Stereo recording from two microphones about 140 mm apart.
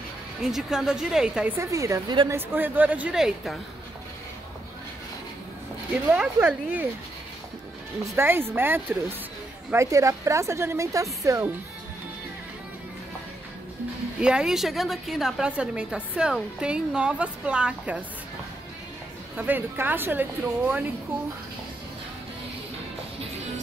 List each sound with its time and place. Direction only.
0.4 s a woman's voice: 5° right (ahead or behind)
1.6 s a woman's voice: 20° right (ahead or behind); by 3.5 s 5° right (ahead or behind)
6.1 s a woman's voice: 10° right (ahead or behind)
8.0 s a woman's voice: 15° right (ahead or behind)
14.2 s a woman's voice: 5° right (ahead or behind)
19.3 s a woman's voice: 15° right (ahead or behind)